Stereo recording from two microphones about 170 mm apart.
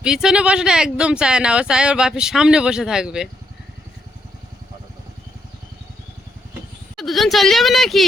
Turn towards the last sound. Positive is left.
turn(degrees=0)  # may be behind; listen again after turning